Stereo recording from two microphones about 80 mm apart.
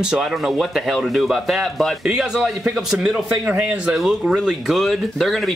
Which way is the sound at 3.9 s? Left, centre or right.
Centre.